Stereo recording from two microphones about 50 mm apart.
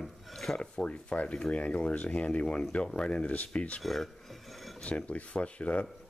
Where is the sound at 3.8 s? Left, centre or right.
Centre.